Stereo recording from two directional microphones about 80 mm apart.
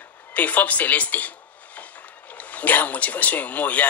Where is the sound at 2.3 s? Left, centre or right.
Centre.